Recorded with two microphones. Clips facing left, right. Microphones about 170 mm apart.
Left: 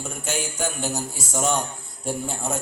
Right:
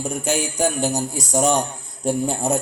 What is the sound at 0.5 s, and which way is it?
Speech, 40° right (ahead or behind).